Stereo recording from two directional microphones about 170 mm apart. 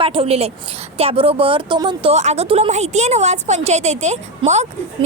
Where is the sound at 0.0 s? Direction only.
35° right (ahead or behind).